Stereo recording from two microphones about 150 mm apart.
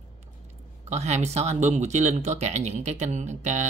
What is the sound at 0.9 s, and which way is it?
Speech, 50° right (ahead or behind).